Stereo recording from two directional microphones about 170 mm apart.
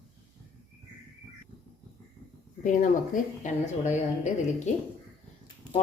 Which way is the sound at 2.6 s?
50° left (ahead or behind).